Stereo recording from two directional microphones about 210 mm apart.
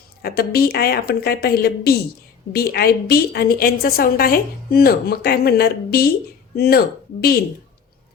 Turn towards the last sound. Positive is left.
turn(degrees=50)  # may be behind; listen again after turning